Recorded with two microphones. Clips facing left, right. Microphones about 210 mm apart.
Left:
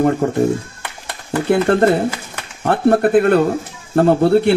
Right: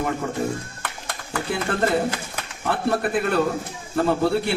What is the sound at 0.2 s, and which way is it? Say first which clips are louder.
Speech: left 10 dB; 60° left (ahead or behind).